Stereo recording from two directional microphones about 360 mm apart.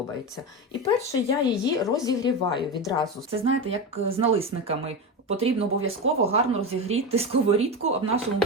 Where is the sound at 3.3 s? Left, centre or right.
Centre.